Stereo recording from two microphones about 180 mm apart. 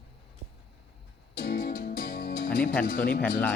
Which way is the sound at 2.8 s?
50° left (ahead or behind).